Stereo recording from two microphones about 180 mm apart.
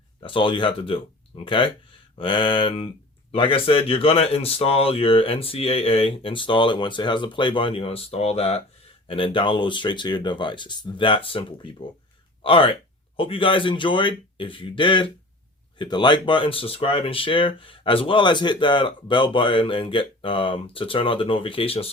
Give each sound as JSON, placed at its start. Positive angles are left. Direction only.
{"t": 0.2, "sound": "speech", "side_deg": 25}